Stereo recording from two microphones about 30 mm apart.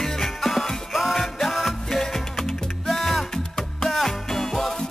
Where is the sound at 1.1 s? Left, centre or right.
Centre.